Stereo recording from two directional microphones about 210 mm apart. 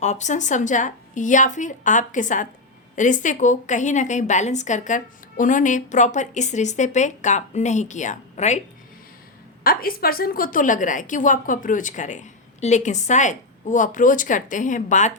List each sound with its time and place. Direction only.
0.0 s a woman's voice: 35° left (ahead or behind)
9.6 s a woman's voice: 45° left (ahead or behind)